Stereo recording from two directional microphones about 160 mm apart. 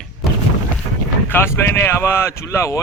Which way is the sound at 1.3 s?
15° left (ahead or behind).